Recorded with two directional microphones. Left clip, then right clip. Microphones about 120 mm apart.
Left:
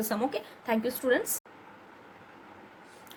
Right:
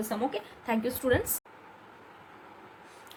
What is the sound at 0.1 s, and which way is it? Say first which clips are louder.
Speech: even; 40° left (ahead or behind).